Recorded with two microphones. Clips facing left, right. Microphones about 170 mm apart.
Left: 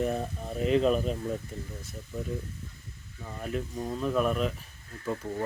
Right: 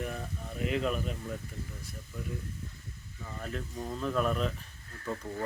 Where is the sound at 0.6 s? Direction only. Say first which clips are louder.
Left 7 dB; 30° left (ahead or behind).